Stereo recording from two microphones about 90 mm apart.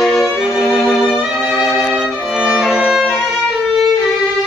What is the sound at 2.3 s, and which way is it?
Violin, 10° right (ahead or behind).